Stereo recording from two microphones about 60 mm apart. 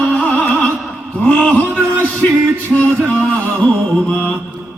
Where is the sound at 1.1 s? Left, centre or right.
Left.